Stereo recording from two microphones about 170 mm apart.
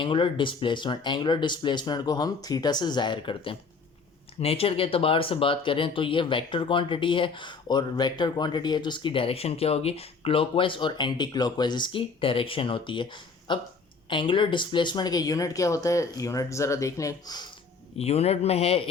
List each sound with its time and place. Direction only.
0.0 s speech: 30° left (ahead or behind)
17.9 s speech: 40° left (ahead or behind)